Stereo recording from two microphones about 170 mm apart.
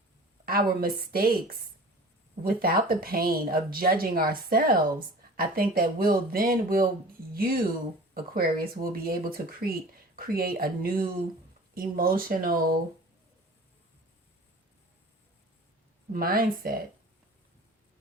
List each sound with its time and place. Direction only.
0.4 s speech: 60° right (ahead or behind)
16.1 s speech: 60° right (ahead or behind)